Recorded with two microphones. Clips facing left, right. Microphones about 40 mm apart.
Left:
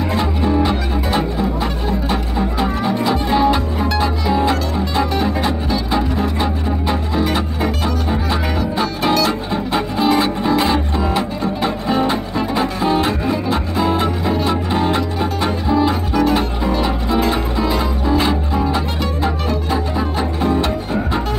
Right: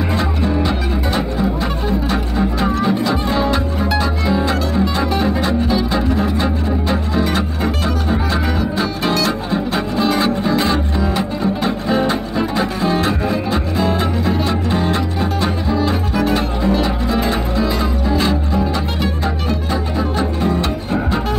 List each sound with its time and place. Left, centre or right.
0.1 s music: centre
2.3 s music: centre
3.1 s music: centre
5.9 s music: centre
7.6 s music: centre
15.9 s double bass: centre
17.3 s music: centre